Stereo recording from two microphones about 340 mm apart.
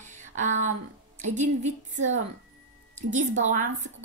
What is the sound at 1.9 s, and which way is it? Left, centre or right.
Speech, right.